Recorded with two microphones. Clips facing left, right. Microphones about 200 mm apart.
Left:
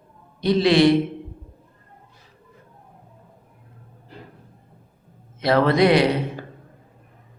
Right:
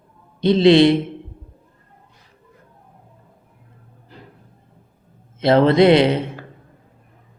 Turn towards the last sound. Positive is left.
turn(degrees=-25)  # may be behind; listen again after turning